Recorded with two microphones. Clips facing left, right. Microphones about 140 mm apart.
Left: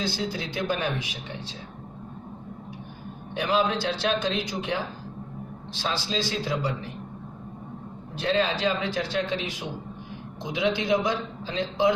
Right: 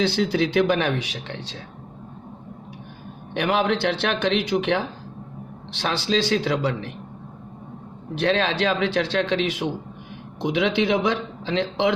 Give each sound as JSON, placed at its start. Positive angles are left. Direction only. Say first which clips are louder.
{"t": 0.0, "sound": "a man's voice", "louder": "right 9 dB", "side_deg": -70}
{"t": 3.3, "sound": "a man's voice", "louder": "right 3 dB", "side_deg": -65}
{"t": 8.1, "sound": "a man's voice", "louder": "right 3 dB", "side_deg": -75}